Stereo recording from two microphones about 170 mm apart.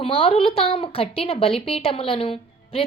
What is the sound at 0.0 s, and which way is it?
A woman's voice, 35° left (ahead or behind).